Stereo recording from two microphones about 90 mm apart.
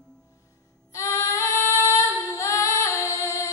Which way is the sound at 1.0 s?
35° left (ahead or behind).